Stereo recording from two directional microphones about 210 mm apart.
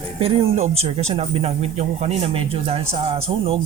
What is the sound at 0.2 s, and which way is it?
Speech, 25° right (ahead or behind).